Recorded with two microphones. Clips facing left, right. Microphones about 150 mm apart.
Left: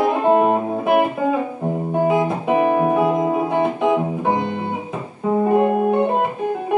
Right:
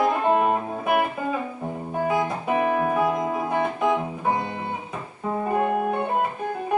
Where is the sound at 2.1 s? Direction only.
20° left (ahead or behind).